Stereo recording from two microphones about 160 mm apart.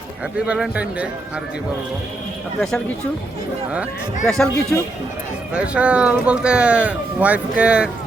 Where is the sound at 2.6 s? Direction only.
5° left (ahead or behind).